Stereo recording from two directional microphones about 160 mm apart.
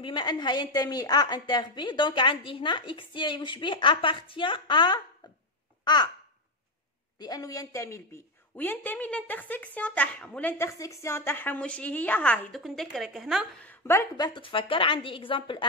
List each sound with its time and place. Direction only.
0.0 s a woman's voice: 30° left (ahead or behind)
7.2 s speech: 25° left (ahead or behind); by 13.7 s centre (ahead or behind)
13.7 s a woman's voice: 15° left (ahead or behind); by 15.6 s 30° left (ahead or behind)